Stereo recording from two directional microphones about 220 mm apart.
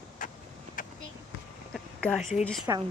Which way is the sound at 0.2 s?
35° left (ahead or behind).